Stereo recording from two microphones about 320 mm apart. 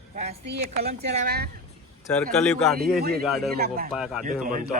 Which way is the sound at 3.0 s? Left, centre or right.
Right.